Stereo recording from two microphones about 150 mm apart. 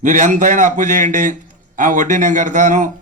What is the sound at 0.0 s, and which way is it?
A man's voice, 55° right (ahead or behind).